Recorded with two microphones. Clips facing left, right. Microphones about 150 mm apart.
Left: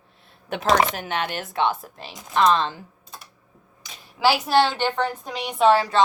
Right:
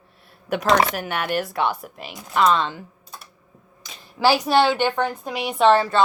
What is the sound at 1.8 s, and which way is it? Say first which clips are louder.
Speech: right 4 dB; 35° left (ahead or behind).